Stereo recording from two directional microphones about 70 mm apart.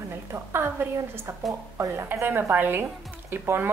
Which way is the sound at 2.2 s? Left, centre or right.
Right.